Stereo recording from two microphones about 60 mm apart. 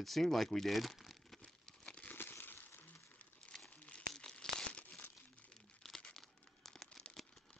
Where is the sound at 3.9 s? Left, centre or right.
Centre.